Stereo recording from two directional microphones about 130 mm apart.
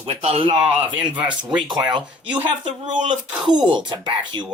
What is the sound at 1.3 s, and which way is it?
Speech, 35° right (ahead or behind).